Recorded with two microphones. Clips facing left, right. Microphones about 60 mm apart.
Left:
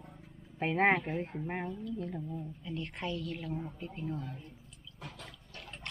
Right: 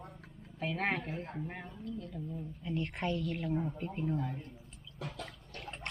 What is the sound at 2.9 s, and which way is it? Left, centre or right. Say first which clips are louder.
Speech: right 3 dB; centre.